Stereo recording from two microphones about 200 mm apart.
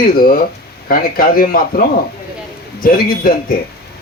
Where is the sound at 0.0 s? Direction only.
45° left (ahead or behind).